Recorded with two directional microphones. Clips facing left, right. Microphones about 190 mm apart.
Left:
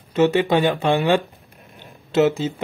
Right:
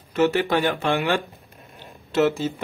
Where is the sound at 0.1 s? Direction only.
20° left (ahead or behind).